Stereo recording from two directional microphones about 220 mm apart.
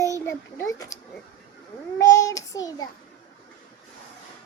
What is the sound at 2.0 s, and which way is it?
Child singing, 15° left (ahead or behind).